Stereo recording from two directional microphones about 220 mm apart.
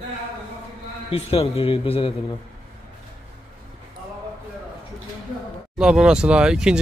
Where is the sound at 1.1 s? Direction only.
25° left (ahead or behind).